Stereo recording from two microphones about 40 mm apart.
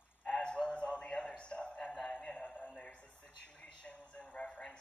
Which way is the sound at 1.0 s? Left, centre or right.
Centre.